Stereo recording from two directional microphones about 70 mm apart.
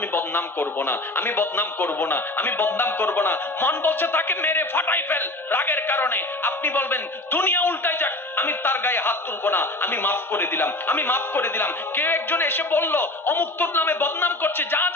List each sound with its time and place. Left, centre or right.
0.1 s speech: left